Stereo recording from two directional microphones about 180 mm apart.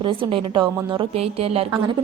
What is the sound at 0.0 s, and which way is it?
Speech, 30° right (ahead or behind).